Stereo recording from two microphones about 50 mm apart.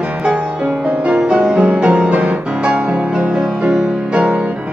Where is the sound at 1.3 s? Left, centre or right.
Centre.